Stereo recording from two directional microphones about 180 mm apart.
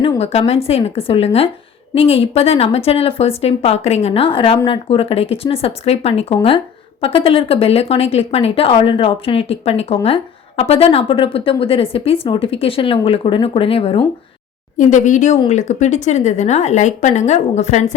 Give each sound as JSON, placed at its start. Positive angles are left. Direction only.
{"t": 0.0, "sound": "speech", "side_deg": 30}
{"t": 14.8, "sound": "speech", "side_deg": 45}